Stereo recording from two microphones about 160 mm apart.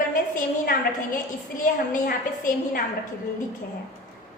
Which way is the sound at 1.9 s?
65° left (ahead or behind).